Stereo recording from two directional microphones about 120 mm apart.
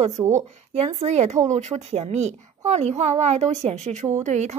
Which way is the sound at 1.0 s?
70° right (ahead or behind).